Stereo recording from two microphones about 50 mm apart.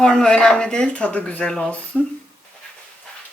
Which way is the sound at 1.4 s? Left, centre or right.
Centre.